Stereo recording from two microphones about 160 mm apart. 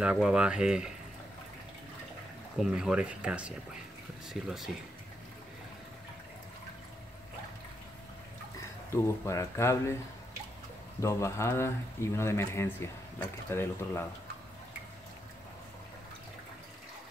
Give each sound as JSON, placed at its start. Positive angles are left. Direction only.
{"t": 0.0, "sound": "speech", "side_deg": -5}
{"t": 2.6, "sound": "speech", "side_deg": -5}
{"t": 8.9, "sound": "speech", "side_deg": 15}
{"t": 11.0, "sound": "speech", "side_deg": 20}